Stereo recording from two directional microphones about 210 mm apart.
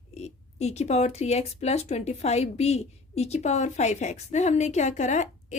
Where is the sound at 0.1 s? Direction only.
30° left (ahead or behind).